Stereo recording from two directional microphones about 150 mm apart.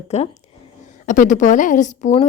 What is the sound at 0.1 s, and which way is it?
Speech, 45° left (ahead or behind).